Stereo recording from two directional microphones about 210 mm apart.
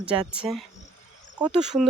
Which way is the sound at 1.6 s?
5° right (ahead or behind).